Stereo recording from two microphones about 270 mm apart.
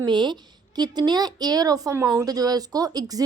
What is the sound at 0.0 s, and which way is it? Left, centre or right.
A woman's voice, centre.